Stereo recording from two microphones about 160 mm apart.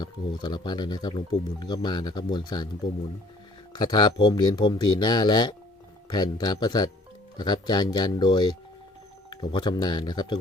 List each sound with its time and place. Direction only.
0.0 s speech: 25° left (ahead or behind)
3.8 s speech: 25° left (ahead or behind)